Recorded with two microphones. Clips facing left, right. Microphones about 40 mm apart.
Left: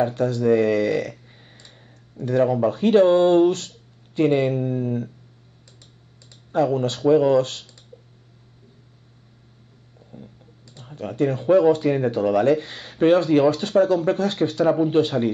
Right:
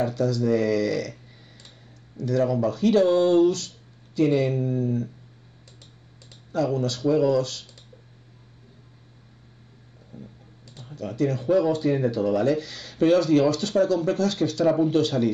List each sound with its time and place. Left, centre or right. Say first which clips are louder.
0.0 s speech: left 3 dB; left
6.5 s speech: left 4 dB; left
10.8 s speech: left 3 dB; left